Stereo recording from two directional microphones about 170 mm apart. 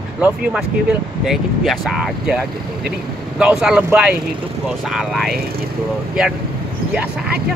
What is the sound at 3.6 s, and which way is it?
Speech, 5° right (ahead or behind).